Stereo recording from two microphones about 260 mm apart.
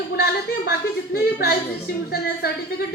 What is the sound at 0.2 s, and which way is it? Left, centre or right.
Speech, left.